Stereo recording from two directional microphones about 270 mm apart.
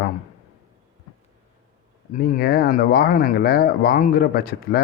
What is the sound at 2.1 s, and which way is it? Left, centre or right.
Speech, left.